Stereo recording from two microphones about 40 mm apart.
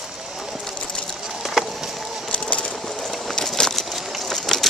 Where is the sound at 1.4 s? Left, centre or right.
Centre.